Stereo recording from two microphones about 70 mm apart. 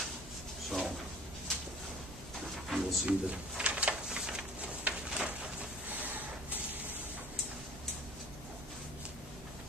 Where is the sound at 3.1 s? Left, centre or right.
Centre.